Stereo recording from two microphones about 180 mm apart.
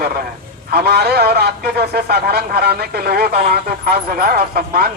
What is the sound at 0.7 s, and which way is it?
Speech, 60° right (ahead or behind).